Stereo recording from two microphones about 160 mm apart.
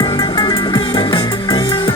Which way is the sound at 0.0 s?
30° left (ahead or behind).